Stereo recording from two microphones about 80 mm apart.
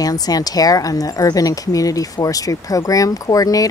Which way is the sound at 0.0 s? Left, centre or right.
Left.